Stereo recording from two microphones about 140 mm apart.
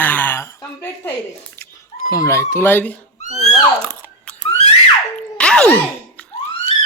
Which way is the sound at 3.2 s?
55° left (ahead or behind).